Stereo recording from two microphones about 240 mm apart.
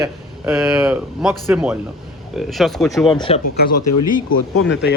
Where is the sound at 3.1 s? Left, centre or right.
Centre.